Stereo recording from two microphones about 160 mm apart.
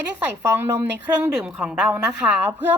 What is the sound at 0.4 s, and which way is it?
A woman's voice, 15° right (ahead or behind).